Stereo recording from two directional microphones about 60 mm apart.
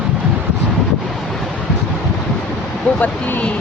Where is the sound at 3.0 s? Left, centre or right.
Left.